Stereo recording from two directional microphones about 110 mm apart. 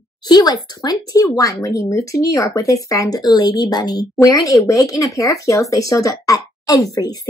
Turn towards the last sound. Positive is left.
turn(degrees=35)  # may be behind; listen again after turning